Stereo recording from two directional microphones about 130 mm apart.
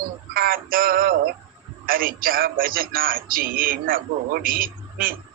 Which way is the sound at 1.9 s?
90° right.